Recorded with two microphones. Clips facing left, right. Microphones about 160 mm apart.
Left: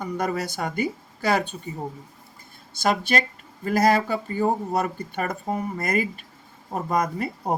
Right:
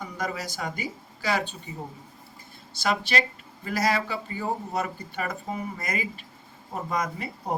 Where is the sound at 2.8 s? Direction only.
45° left (ahead or behind).